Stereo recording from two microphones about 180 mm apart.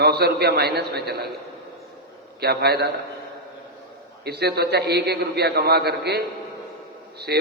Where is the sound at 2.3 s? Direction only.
60° right (ahead or behind).